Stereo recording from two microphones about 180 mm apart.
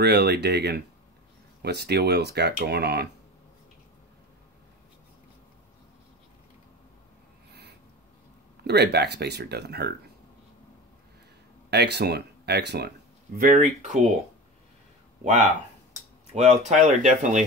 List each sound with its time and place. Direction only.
0.0 s speech: 65° right (ahead or behind)
8.6 s speech: 65° right (ahead or behind)
11.7 s speech: 65° right (ahead or behind)
13.4 s speech: 45° right (ahead or behind)
16.3 s speech: 40° right (ahead or behind)